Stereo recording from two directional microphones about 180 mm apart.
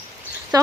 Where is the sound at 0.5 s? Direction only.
20° right (ahead or behind).